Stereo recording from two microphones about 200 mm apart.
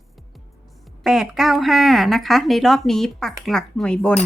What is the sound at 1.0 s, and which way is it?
A woman's voice, centre (ahead or behind).